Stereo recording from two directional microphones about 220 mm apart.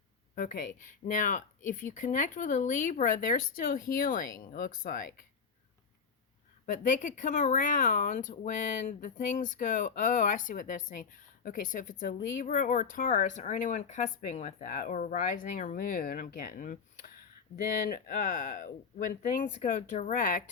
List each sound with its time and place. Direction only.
0.3 s speech: 35° left (ahead or behind)
6.7 s speech: 35° left (ahead or behind)